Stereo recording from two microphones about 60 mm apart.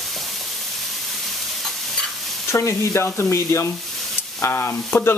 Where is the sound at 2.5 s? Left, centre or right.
Left.